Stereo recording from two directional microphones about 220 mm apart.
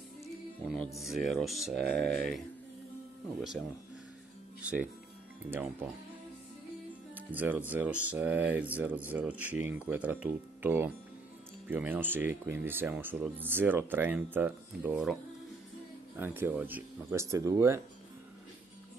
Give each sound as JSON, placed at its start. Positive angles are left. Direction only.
{"t": 0.2, "sound": "music", "side_deg": 0}
{"t": 0.9, "sound": "speech", "side_deg": 0}
{"t": 7.2, "sound": "speech", "side_deg": -10}
{"t": 16.2, "sound": "speech", "side_deg": -10}